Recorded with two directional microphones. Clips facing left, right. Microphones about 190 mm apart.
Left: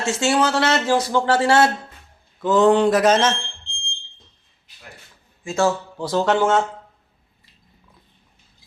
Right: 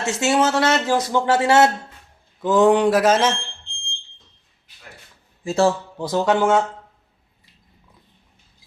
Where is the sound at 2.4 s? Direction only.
15° right (ahead or behind).